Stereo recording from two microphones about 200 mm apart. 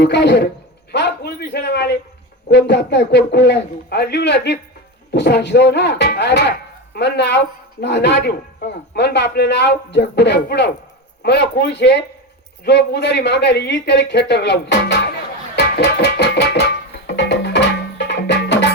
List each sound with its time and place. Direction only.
0.0 s speech: 60° left (ahead or behind)
0.9 s a sound: 55° left (ahead or behind)
2.5 s speech: 60° left (ahead or behind)
15.5 s music: 55° left (ahead or behind)